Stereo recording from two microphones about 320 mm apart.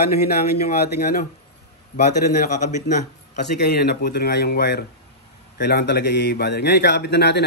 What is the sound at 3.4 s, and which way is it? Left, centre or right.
A man's voice, left.